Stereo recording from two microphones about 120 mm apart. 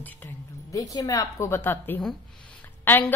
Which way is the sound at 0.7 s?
30° left (ahead or behind).